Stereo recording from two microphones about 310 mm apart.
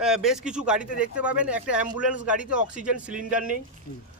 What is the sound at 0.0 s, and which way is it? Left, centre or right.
Speech, centre.